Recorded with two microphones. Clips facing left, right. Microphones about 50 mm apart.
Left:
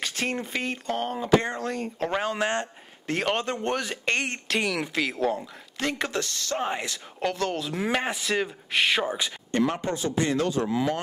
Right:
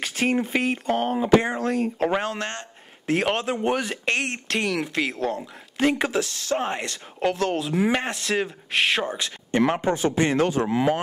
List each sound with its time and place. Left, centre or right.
0.0 s speech: centre
2.3 s speech: centre
3.1 s speech: centre
5.8 s speech: centre
9.5 s speech: centre
9.9 s speech: right